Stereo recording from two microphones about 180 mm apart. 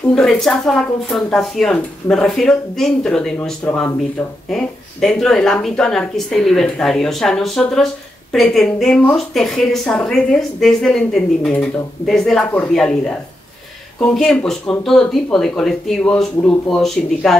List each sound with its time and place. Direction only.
0.1 s a woman's voice: centre (ahead or behind)